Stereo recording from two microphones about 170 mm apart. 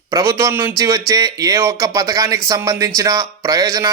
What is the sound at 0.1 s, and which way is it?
Speech, 20° right (ahead or behind).